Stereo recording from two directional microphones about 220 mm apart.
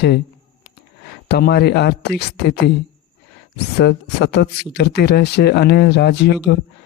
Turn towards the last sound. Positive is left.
turn(degrees=50)  # may be behind; listen again after turning